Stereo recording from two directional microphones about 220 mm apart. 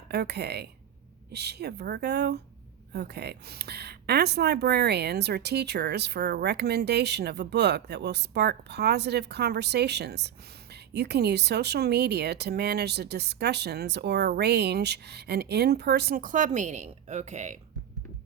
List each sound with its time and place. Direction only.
0.1 s speech: 45° right (ahead or behind); by 17.6 s 30° right (ahead or behind)